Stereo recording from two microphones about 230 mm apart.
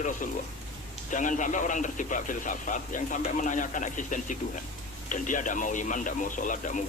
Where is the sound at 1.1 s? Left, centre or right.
Left.